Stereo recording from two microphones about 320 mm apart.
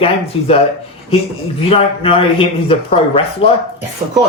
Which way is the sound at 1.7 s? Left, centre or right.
Centre.